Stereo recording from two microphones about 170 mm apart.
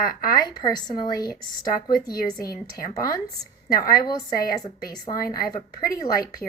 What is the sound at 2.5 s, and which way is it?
Speech, 20° left (ahead or behind).